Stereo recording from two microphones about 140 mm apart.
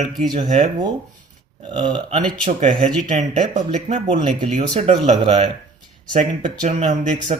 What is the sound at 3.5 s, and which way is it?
Speech, 55° right (ahead or behind).